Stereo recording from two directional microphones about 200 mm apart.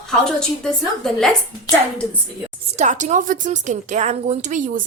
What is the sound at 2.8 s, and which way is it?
A woman's voice, 35° right (ahead or behind).